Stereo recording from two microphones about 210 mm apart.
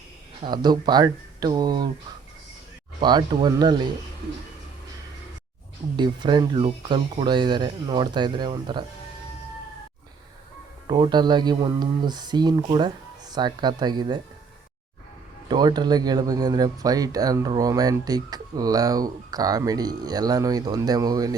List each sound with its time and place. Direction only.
0.4 s speech: 20° right (ahead or behind)
3.0 s speech: 20° right (ahead or behind)
6.0 s speech: 20° right (ahead or behind)
10.8 s speech: 20° right (ahead or behind)
15.4 s speech: 20° right (ahead or behind)